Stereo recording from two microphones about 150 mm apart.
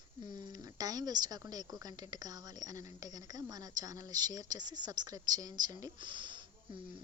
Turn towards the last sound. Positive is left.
turn(degrees=-30)  # may be behind; listen again after turning